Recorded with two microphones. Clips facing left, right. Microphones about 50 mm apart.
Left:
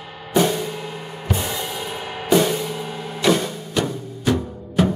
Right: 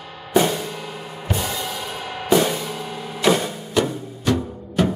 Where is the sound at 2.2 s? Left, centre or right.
Centre.